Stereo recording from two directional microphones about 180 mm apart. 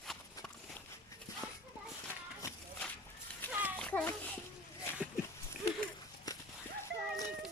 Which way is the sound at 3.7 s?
10° left (ahead or behind).